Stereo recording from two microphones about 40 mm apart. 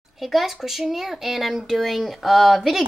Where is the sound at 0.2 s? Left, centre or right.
Centre.